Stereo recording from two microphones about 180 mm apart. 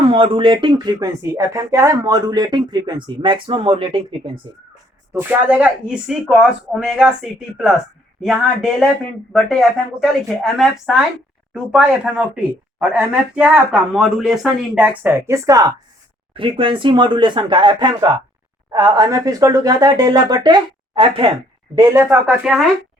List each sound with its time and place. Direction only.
0.1 s speech: 30° right (ahead or behind)
5.1 s a woman's voice: 5° right (ahead or behind); by 21.2 s 30° right (ahead or behind)
21.8 s speech: 20° right (ahead or behind)
22.3 s speech: 5° right (ahead or behind)